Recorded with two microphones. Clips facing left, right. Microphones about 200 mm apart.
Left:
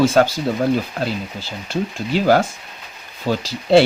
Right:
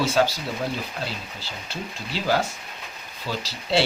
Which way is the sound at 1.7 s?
50° left (ahead or behind).